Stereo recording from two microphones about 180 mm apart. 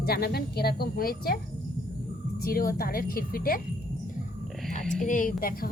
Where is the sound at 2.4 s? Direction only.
55° left (ahead or behind).